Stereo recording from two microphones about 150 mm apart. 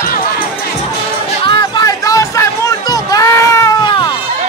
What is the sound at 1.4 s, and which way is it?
Music, 25° left (ahead or behind).